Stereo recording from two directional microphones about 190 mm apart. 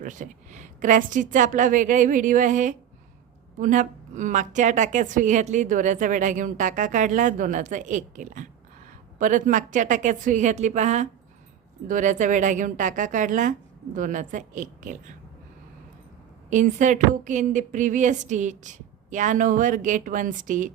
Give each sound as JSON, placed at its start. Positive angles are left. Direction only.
{"t": 0.0, "sound": "a woman's voice", "side_deg": -40}
{"t": 16.5, "sound": "a woman's voice", "side_deg": -40}